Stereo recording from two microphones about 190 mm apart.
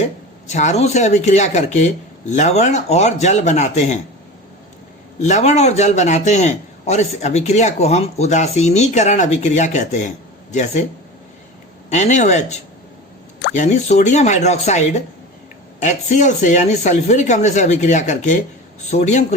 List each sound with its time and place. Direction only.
0.4 s a man's voice: 35° left (ahead or behind)
5.2 s a man's voice: 35° left (ahead or behind)
11.9 s a man's voice: 40° left (ahead or behind)
13.6 s a man's voice: 35° left (ahead or behind)